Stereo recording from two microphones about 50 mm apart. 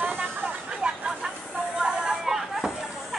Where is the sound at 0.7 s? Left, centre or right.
Centre.